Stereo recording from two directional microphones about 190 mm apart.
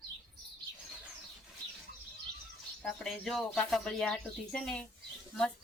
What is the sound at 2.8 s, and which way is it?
Speech, 5° left (ahead or behind).